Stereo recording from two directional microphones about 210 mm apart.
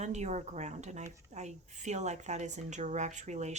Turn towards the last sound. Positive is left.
turn(degrees=-35)  # may be behind; listen again after turning